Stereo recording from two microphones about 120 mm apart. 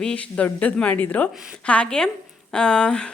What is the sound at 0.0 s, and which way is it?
Speech, 10° left (ahead or behind).